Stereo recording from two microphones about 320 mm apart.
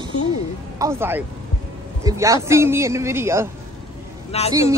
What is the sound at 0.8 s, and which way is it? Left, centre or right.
A woman's voice, centre.